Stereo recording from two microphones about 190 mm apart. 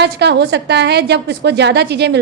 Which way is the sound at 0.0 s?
60° right (ahead or behind).